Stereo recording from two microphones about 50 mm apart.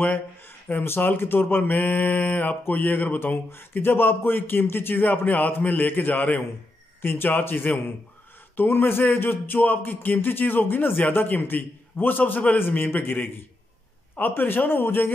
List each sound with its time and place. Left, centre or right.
0.8 s music: left
3.5 s a man's voice: left
5.6 s music: left
8.5 s a man's voice: left
9.0 s music: left
12.6 s a man's voice: left
14.1 s music: left